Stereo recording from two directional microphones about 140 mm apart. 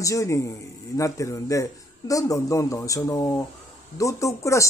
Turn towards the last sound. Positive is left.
turn(degrees=20)  # may be behind; listen again after turning